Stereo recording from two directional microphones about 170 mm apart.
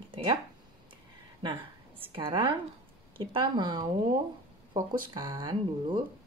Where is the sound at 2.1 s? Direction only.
30° right (ahead or behind).